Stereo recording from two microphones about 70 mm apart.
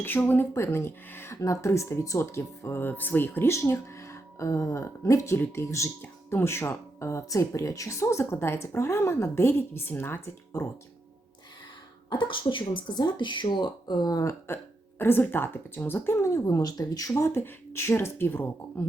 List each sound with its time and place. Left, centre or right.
0.2 s speech: left
0.5 s speech: left
2.7 s speech: left
3.5 s speech: left
12.9 s speech: left
14.3 s speech: left
16.6 s speech: left